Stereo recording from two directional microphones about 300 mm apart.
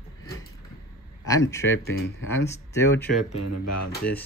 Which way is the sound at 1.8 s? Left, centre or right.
Left.